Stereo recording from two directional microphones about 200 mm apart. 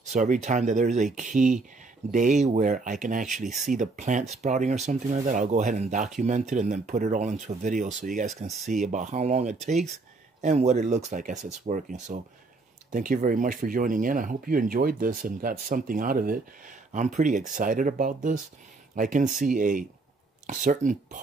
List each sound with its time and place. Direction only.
0.1 s speech: 35° right (ahead or behind)